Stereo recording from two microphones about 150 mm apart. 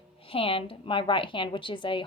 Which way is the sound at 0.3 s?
35° left (ahead or behind).